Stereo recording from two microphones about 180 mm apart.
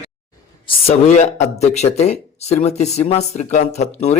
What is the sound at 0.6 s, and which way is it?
A man's voice, 35° left (ahead or behind).